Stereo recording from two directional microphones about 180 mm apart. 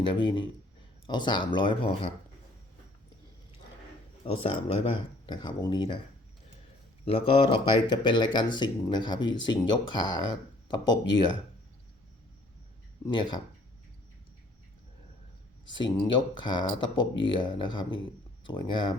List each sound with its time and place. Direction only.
0.0 s speech: 25° left (ahead or behind)
4.3 s speech: 30° left (ahead or behind)
7.0 s speech: 30° left (ahead or behind)
13.1 s speech: 25° left (ahead or behind)
15.6 s speech: 25° left (ahead or behind)